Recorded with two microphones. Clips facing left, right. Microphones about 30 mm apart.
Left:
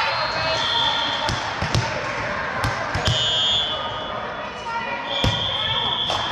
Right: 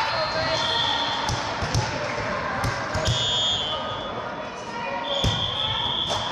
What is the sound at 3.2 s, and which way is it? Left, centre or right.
Basketball bounce, centre.